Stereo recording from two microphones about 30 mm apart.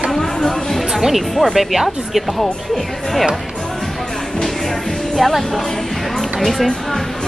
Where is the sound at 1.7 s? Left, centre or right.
Centre.